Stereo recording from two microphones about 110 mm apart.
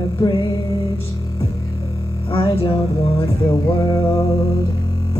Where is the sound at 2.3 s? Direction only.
60° left (ahead or behind).